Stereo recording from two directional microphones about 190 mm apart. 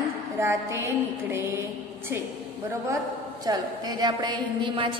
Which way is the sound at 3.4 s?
20° right (ahead or behind).